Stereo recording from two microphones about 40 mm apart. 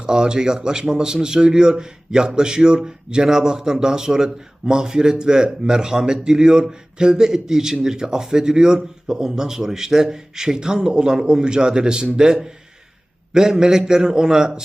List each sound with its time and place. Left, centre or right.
0.0 s a man's voice: centre